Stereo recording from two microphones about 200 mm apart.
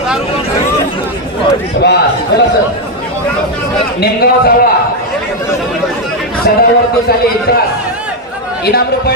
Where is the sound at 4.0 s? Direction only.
50° left (ahead or behind).